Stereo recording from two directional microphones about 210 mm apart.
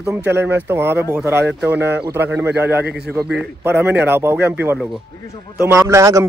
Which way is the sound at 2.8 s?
50° right (ahead or behind).